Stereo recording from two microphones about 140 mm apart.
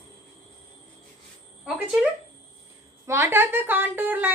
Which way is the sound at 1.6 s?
10° right (ahead or behind).